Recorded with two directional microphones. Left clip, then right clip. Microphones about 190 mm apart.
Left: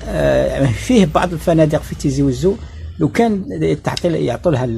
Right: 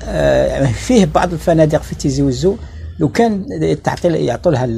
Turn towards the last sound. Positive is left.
turn(degrees=20)  # may be behind; listen again after turning